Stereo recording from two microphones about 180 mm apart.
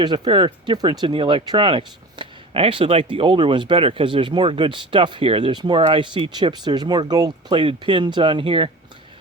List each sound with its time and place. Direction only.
0.0 s speech: 25° right (ahead or behind)